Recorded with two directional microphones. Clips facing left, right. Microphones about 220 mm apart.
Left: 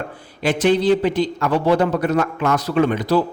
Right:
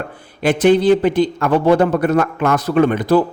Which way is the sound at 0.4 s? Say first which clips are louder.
Right 4 dB; 55° right (ahead or behind).